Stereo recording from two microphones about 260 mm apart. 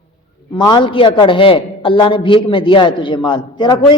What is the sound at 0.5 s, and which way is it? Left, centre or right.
A man's voice, centre.